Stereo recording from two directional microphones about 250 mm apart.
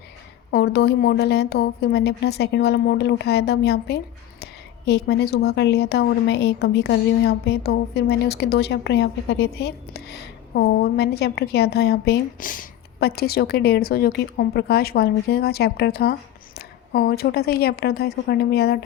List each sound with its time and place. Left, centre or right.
0.5 s a woman's voice: left